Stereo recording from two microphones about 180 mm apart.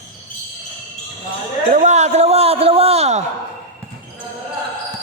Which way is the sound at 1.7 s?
40° right (ahead or behind).